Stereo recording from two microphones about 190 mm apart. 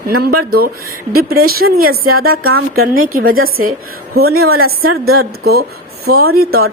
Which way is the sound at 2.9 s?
50° right (ahead or behind).